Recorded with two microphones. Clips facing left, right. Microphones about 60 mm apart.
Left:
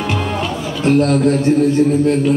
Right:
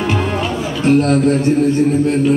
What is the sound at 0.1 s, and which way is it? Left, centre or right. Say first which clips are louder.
Music: right 2 dB; centre.